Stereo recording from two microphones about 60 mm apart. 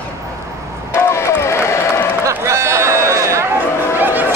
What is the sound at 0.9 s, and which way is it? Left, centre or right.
Crowd, left.